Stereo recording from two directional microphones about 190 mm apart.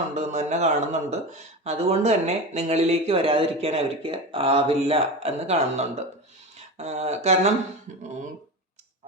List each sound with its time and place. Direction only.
0.1 s speech: 35° right (ahead or behind)